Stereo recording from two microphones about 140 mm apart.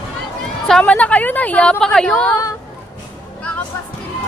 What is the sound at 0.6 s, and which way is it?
A woman's voice, 5° left (ahead or behind).